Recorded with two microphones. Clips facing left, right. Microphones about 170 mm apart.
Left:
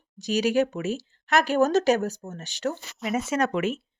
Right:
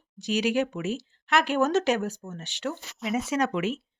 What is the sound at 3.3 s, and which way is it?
Speech, 50° left (ahead or behind).